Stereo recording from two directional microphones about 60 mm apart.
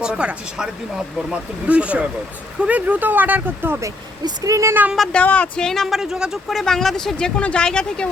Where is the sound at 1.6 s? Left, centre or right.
Right.